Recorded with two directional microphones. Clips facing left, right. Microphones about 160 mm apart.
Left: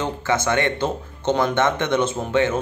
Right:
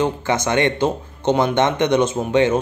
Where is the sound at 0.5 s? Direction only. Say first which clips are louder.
Right 6 dB; 20° right (ahead or behind).